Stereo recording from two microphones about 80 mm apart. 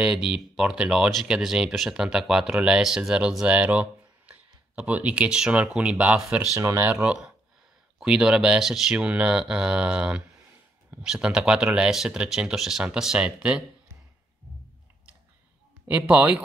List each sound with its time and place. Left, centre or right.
0.0 s speech: centre
6.6 s speech: right
6.9 s speech: centre
16.1 s speech: centre